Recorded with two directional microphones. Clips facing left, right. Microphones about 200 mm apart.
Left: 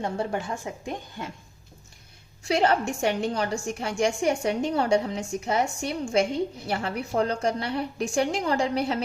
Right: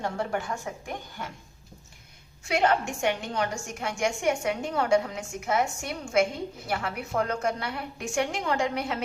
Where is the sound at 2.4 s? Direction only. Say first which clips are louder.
Left 2 dB; 35° left (ahead or behind).